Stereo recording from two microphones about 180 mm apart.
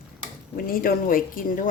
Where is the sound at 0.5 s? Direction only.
55° left (ahead or behind).